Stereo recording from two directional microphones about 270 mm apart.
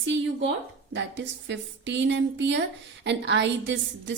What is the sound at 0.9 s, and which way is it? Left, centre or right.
A woman's voice, right.